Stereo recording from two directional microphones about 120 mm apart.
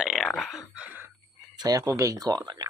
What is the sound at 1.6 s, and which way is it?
Speech, 30° right (ahead or behind).